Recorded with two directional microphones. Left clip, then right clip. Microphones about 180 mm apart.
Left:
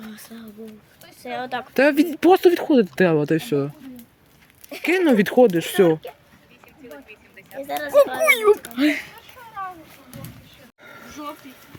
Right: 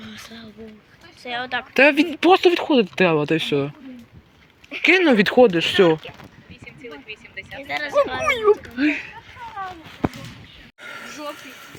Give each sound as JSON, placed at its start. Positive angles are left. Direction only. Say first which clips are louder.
{"t": 0.0, "sound": "a sound", "louder": "right 2 dB", "side_deg": 50}
{"t": 1.2, "sound": "speech", "louder": "right 2 dB", "side_deg": 55}
{"t": 1.7, "sound": "speech", "louder": "right 3 dB", "side_deg": 25}
{"t": 2.0, "sound": "speech", "louder": "even", "side_deg": 40}
{"t": 4.8, "sound": "speech", "louder": "right 3 dB", "side_deg": 10}
{"t": 6.7, "sound": "a sound", "louder": "right 5 dB", "side_deg": 0}
{"t": 7.6, "sound": "speech", "louder": "even", "side_deg": 55}
{"t": 8.2, "sound": "speech", "louder": "left 2 dB", "side_deg": 30}
{"t": 8.8, "sound": "speech", "louder": "left 1 dB", "side_deg": 50}
{"t": 10.8, "sound": "a sound", "louder": "right 8 dB", "side_deg": 5}